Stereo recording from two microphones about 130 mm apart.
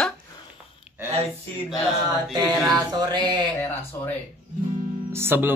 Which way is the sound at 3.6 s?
15° left (ahead or behind).